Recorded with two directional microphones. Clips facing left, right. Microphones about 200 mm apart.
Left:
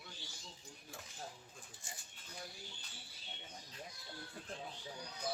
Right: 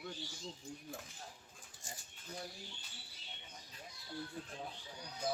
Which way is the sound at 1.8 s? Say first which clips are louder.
Right 4 dB; 45° right (ahead or behind).